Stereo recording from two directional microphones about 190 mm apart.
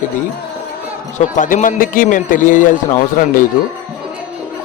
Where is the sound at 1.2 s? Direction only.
40° left (ahead or behind).